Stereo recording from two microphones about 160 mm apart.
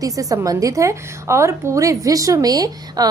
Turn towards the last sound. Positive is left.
turn(degrees=-25)  # may be behind; listen again after turning